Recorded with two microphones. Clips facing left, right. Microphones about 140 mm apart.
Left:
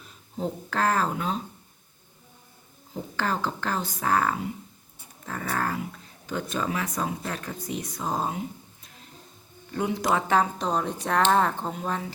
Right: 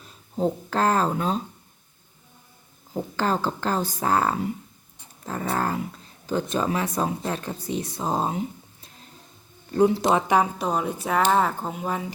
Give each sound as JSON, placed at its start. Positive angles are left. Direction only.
{"t": 0.0, "sound": "speech", "side_deg": -35}
{"t": 2.9, "sound": "speech", "side_deg": -35}